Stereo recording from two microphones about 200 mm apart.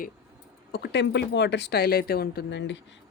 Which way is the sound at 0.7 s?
55° left (ahead or behind).